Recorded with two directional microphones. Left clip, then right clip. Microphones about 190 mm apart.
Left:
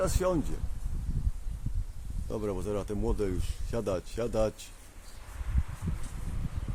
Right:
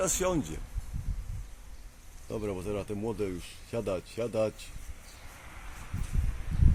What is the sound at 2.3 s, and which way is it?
Speech, 10° left (ahead or behind).